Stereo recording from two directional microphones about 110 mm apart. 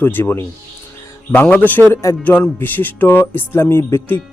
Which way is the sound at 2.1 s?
30° left (ahead or behind).